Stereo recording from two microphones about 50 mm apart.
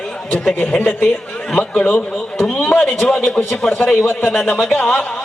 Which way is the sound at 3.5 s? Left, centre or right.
Centre.